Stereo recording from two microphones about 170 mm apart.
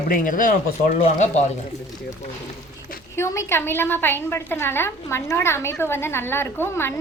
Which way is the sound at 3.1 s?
15° left (ahead or behind).